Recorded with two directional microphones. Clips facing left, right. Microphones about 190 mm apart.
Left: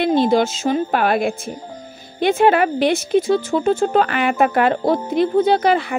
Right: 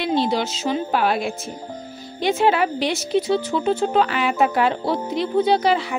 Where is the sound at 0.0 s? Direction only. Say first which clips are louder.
Left 5 dB; 50° left (ahead or behind).